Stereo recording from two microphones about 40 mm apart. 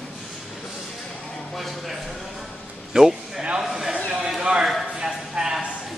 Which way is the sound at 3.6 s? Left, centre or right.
Centre.